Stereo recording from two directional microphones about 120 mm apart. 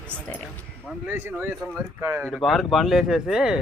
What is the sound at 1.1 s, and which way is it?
Speech, 15° right (ahead or behind).